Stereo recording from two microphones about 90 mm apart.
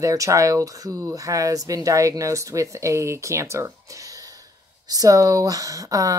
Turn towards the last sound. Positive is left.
turn(degrees=-40)  # may be behind; listen again after turning